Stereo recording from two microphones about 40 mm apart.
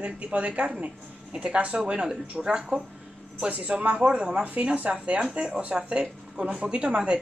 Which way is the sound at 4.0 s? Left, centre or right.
Right.